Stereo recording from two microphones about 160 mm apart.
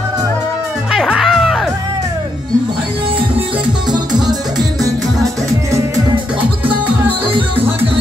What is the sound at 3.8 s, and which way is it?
Music, 25° right (ahead or behind).